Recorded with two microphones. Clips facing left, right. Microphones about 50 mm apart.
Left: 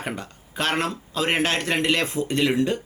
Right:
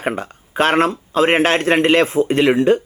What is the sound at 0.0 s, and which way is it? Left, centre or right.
Speech, right.